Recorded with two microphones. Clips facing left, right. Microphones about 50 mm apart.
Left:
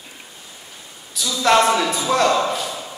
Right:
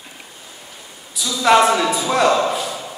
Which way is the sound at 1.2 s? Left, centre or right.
Centre.